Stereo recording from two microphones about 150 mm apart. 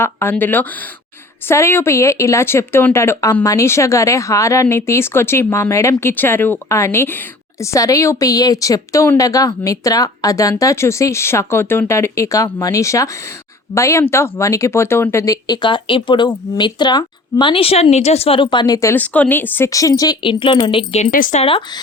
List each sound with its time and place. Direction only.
0.0 s speech: 15° left (ahead or behind)
18.9 s speech: 10° left (ahead or behind); by 21.0 s 35° left (ahead or behind)
21.0 s speech: 65° left (ahead or behind)
21.3 s speech: 35° left (ahead or behind)